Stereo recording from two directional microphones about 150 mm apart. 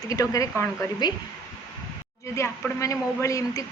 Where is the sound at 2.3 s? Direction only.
20° left (ahead or behind).